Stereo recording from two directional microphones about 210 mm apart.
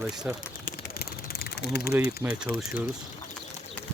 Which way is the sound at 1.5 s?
50° left (ahead or behind).